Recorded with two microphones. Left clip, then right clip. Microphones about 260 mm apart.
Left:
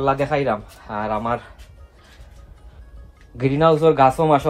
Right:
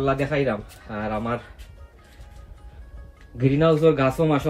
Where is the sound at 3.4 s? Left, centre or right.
Centre.